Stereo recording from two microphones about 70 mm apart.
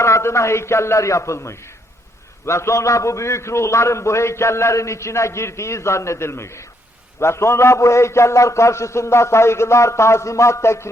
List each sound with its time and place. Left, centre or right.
0.0 s a man's voice: left